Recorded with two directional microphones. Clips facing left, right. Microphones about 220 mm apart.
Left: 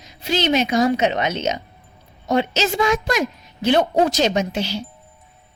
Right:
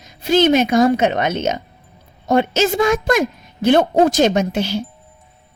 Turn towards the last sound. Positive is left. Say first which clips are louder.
# right 4 dB
turn(degrees=-50)  # may be behind; listen again after turning